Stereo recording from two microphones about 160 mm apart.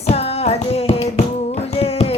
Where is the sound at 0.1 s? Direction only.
40° left (ahead or behind).